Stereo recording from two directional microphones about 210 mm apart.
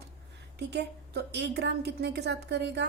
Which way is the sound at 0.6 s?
50° right (ahead or behind).